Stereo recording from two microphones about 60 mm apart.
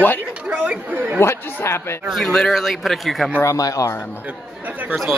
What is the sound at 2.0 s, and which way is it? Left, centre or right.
Speech, centre.